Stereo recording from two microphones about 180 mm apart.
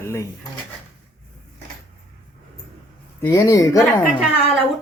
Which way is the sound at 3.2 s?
20° left (ahead or behind).